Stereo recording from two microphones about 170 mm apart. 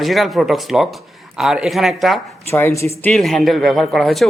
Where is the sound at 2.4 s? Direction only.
15° left (ahead or behind).